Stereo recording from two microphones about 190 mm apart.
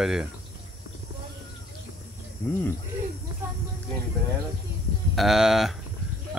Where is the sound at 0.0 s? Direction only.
5° right (ahead or behind).